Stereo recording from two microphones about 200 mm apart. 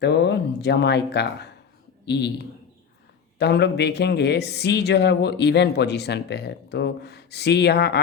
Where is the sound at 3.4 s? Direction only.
55° left (ahead or behind).